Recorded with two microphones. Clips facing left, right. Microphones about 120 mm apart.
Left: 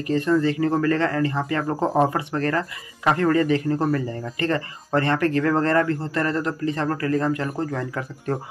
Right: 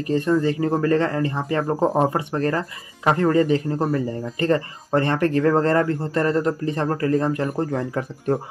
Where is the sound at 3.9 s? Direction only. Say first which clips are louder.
Right 1 dB; 20° right (ahead or behind).